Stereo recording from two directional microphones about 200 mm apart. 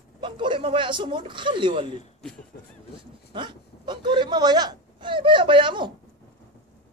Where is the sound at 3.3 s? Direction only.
25° right (ahead or behind).